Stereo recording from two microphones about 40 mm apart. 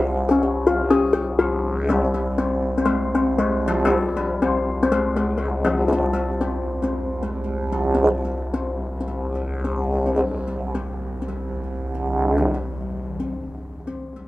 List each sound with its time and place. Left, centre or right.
0.0 s music: right
1.5 s music: centre
1.8 s music: right
12.0 s music: centre